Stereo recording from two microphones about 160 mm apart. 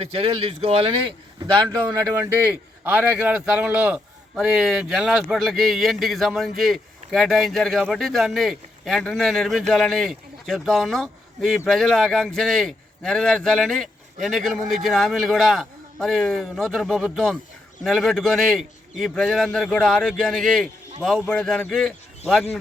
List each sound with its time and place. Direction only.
0.0 s speech: 35° right (ahead or behind)
1.4 s a man's voice: 20° right (ahead or behind); by 22.4 s centre (ahead or behind)